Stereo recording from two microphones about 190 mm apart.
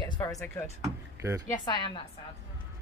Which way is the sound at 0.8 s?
15° right (ahead or behind).